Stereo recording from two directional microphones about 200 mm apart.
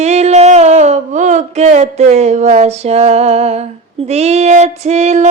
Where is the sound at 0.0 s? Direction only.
35° right (ahead or behind).